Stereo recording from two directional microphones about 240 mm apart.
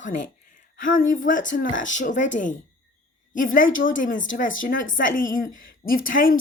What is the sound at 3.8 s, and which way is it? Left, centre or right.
Speech, left.